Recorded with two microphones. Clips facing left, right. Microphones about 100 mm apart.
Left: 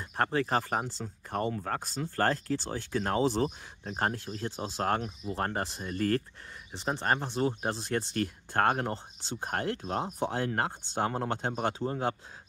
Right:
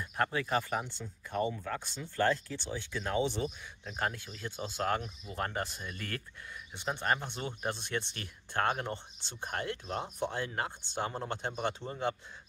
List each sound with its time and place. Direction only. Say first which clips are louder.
0.0 s speech: left 3 dB; 35° left (ahead or behind)
1.0 s speech: left 1 dB; 50° left (ahead or behind)